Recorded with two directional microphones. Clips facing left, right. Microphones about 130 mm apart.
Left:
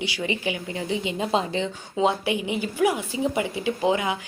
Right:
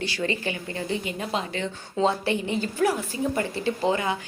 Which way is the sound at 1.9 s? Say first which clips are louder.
Left 1 dB; 15° left (ahead or behind).